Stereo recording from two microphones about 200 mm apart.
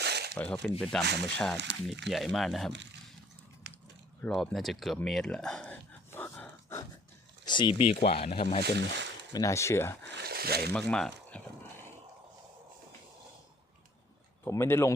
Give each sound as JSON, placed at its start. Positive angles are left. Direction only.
{"t": 0.0, "sound": "a sound", "side_deg": -55}
{"t": 0.3, "sound": "speech", "side_deg": 5}
{"t": 1.7, "sound": "speech", "side_deg": -65}
{"t": 2.0, "sound": "speech", "side_deg": 0}
{"t": 4.2, "sound": "a sound", "side_deg": 0}
{"t": 7.4, "sound": "speech", "side_deg": 25}
{"t": 8.6, "sound": "speech", "side_deg": -60}
{"t": 9.3, "sound": "speech", "side_deg": 15}
{"t": 10.0, "sound": "speech", "side_deg": -50}
{"t": 10.7, "sound": "speech", "side_deg": 5}
{"t": 14.4, "sound": "speech", "side_deg": 15}